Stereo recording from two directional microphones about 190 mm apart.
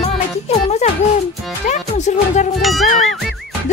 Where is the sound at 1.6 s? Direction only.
40° left (ahead or behind).